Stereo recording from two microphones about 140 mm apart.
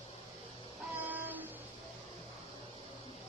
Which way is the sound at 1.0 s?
10° right (ahead or behind).